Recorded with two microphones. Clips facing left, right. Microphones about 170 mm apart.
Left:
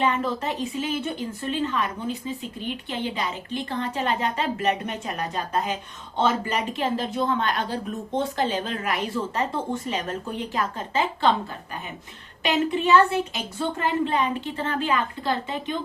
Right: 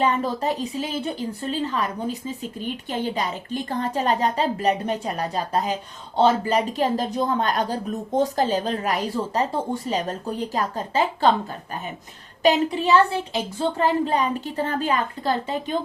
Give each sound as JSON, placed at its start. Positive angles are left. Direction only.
{"t": 0.0, "sound": "a woman's voice", "side_deg": -40}
{"t": 12.4, "sound": "a woman's voice", "side_deg": -40}